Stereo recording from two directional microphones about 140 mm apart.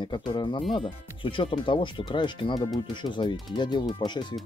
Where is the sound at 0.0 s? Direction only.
35° left (ahead or behind).